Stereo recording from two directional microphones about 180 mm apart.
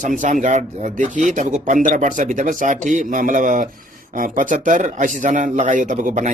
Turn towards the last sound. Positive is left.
turn(degrees=-45)  # may be behind; listen again after turning